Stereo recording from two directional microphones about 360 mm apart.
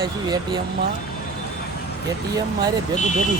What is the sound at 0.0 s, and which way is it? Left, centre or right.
Speech, centre.